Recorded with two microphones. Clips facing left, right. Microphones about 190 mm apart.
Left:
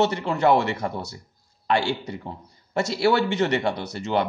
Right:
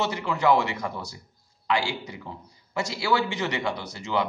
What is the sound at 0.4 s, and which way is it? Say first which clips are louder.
A man's voice: left 3 dB; 60° left (ahead or behind).